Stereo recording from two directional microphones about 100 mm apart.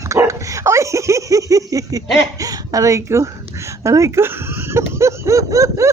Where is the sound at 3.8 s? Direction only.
30° right (ahead or behind).